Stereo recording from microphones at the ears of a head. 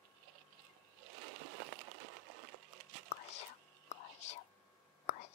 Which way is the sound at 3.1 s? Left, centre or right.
Left.